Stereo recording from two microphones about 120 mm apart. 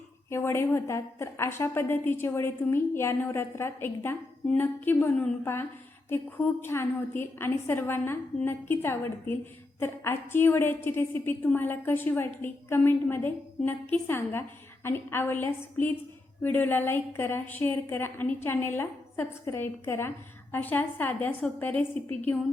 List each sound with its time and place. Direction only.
0.3 s a woman's voice: 20° left (ahead or behind)